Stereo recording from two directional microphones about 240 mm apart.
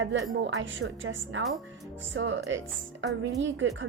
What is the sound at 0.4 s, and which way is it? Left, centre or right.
A woman's voice, right.